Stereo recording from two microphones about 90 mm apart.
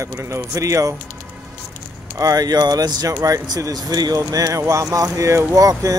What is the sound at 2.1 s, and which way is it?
Speech, 45° right (ahead or behind).